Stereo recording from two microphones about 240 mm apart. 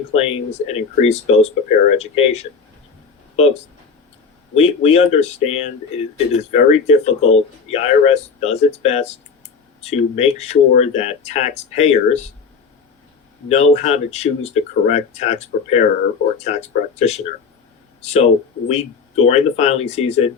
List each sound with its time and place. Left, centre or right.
0.1 s speech: left
4.5 s speech: left
13.5 s speech: left